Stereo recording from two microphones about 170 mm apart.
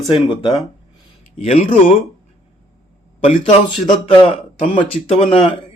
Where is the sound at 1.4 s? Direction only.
40° left (ahead or behind).